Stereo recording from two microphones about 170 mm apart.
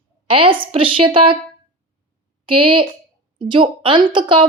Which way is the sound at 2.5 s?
30° right (ahead or behind).